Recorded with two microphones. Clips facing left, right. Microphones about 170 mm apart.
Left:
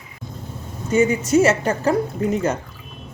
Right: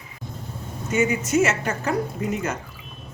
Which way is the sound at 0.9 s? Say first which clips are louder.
Left 5 dB; 30° left (ahead or behind).